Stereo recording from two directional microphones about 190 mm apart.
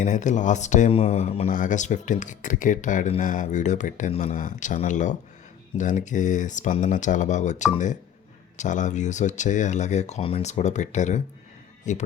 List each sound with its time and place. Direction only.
0.0 s speech: 40° left (ahead or behind)